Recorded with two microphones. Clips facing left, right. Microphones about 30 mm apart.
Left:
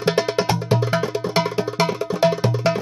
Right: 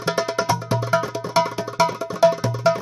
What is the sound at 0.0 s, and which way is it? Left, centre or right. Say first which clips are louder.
Music: left 3 dB; left.